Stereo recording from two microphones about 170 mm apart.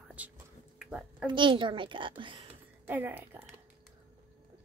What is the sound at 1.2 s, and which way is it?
A woman's voice, 30° right (ahead or behind).